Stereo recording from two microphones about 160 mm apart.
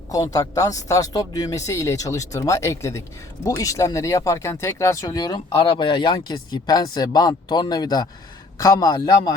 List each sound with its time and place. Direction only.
0.3 s speech: 20° left (ahead or behind)